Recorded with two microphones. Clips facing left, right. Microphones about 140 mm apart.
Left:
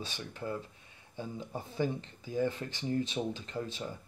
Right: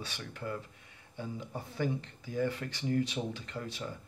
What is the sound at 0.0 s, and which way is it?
Speech, 20° left (ahead or behind).